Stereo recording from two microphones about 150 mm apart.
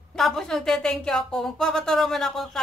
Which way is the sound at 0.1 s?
5° left (ahead or behind).